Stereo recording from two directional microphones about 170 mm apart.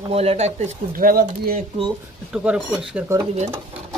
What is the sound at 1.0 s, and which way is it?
Speech, 60° right (ahead or behind).